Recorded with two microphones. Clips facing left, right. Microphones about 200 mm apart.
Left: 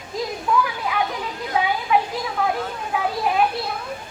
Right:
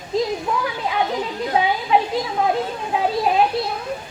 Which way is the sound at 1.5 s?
25° right (ahead or behind).